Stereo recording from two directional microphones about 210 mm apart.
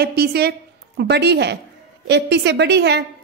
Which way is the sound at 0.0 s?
50° right (ahead or behind).